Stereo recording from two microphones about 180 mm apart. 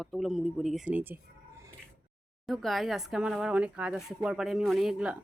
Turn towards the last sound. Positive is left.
turn(degrees=-5)  # may be behind; listen again after turning